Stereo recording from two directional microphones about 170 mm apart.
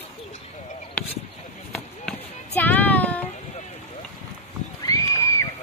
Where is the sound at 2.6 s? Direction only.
10° left (ahead or behind).